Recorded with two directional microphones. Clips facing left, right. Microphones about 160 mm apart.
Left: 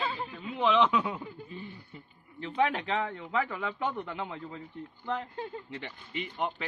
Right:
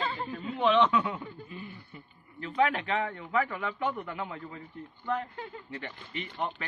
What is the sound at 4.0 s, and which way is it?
Speech, 25° left (ahead or behind).